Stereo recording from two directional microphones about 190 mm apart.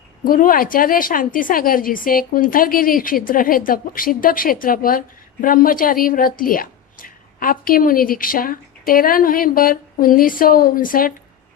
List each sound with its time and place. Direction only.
0.3 s a woman's voice: 45° left (ahead or behind)